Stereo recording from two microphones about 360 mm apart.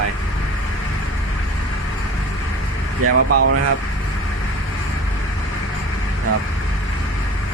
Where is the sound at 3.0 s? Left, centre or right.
Right.